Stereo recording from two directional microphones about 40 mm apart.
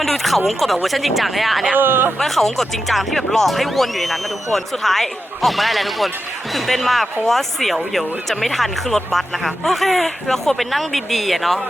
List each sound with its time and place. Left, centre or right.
0.0 s speech: centre
1.7 s speech: right
2.1 s speech: centre